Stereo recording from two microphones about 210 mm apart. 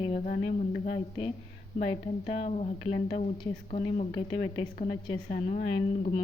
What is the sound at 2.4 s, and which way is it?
Speech, 30° left (ahead or behind).